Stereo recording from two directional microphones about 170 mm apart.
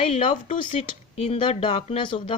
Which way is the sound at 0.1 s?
45° left (ahead or behind).